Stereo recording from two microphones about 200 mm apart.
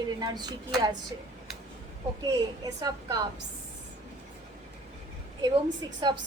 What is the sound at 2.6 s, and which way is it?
Speech, 20° right (ahead or behind).